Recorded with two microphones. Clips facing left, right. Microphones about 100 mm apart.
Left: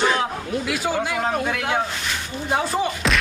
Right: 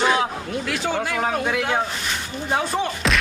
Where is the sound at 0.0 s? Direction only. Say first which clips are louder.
Right 1 dB; 5° right (ahead or behind).